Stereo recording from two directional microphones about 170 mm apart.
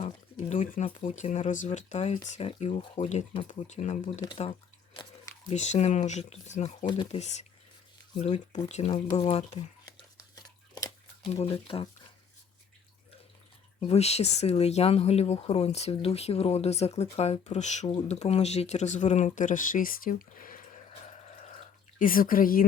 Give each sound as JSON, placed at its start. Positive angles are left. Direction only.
{"t": 0.0, "sound": "a sound", "side_deg": 45}
{"t": 0.9, "sound": "speech", "side_deg": 40}
{"t": 5.5, "sound": "speech", "side_deg": 40}
{"t": 6.8, "sound": "speech", "side_deg": 30}
{"t": 8.2, "sound": "a sound", "side_deg": 45}
{"t": 11.3, "sound": "speech", "side_deg": 35}
{"t": 13.7, "sound": "speech", "side_deg": 35}